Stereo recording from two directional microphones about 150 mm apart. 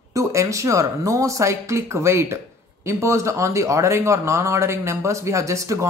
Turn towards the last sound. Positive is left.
turn(degrees=-20)  # may be behind; listen again after turning